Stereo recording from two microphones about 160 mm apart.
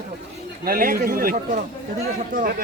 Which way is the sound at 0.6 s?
65° right (ahead or behind).